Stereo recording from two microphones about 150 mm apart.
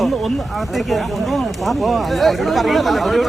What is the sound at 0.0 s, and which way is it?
Speech, centre (ahead or behind).